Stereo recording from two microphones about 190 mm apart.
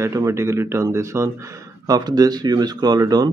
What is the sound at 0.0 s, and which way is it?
Speech, 15° right (ahead or behind).